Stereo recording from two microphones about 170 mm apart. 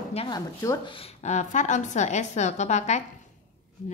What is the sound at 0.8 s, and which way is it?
A woman's voice, 35° left (ahead or behind).